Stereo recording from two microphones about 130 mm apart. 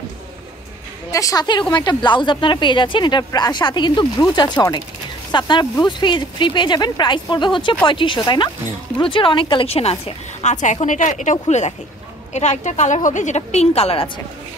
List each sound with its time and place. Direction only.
1.1 s a woman's voice: 25° left (ahead or behind); by 14.1 s 45° left (ahead or behind)